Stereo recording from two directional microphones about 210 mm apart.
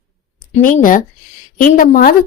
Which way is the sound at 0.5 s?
40° left (ahead or behind).